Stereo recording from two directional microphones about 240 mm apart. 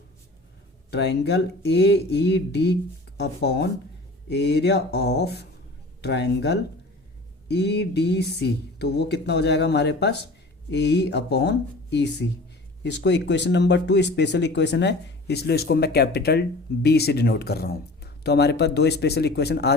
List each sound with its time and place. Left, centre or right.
0.9 s speech: left